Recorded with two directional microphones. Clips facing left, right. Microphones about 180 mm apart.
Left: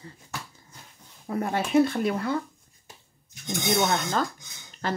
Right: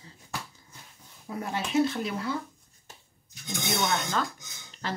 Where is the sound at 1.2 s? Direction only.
55° left (ahead or behind).